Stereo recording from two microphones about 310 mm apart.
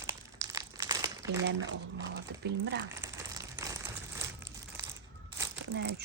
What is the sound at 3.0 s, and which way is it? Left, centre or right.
Crumpling, centre.